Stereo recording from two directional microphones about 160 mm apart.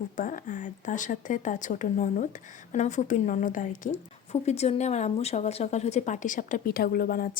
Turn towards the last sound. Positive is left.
turn(degrees=65)  # may be behind; listen again after turning